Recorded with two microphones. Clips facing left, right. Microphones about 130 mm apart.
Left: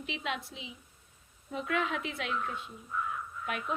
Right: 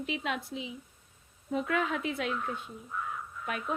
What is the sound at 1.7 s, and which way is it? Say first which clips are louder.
Speech: left 1 dB; 35° right (ahead or behind).